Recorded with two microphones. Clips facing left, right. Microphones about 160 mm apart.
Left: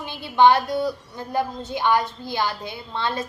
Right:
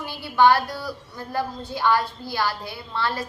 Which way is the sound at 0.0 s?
20° left (ahead or behind).